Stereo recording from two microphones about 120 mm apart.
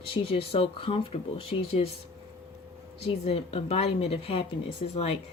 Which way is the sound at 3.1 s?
55° left (ahead or behind).